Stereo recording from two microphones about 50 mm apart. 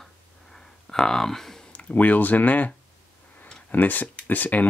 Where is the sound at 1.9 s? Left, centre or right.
Left.